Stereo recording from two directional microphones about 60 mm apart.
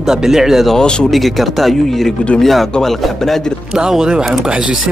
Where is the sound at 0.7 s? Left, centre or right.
Centre.